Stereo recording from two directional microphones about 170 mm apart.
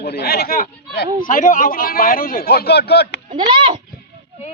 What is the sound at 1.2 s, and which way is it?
A man's voice, 50° left (ahead or behind).